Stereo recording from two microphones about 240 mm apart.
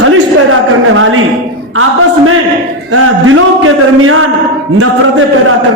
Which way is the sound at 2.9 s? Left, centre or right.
Right.